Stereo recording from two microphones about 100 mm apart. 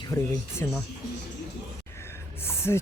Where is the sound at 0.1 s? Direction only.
25° left (ahead or behind).